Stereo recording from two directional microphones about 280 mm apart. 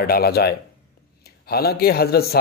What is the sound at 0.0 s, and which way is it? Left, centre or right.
Speech, left.